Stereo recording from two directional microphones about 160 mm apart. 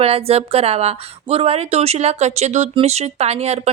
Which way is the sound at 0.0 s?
40° right (ahead or behind).